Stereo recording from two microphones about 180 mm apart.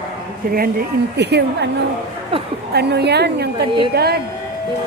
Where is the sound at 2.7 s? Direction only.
65° right (ahead or behind).